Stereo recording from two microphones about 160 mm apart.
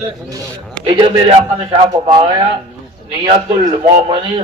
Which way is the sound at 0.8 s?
25° right (ahead or behind).